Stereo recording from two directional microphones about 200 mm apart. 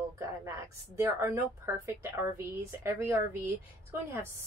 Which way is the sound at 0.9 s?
15° right (ahead or behind).